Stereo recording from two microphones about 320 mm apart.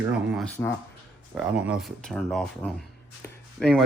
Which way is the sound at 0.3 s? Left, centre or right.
Centre.